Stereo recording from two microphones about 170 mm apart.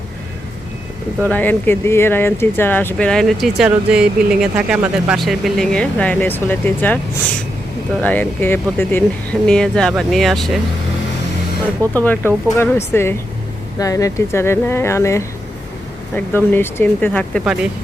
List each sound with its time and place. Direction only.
1.2 s speech: 10° left (ahead or behind)
8.0 s speech: 10° left (ahead or behind)
12.0 s speech: 10° left (ahead or behind)
17.4 s speech: 5° right (ahead or behind)